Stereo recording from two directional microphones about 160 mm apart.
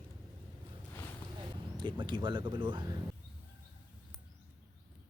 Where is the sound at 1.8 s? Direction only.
30° right (ahead or behind).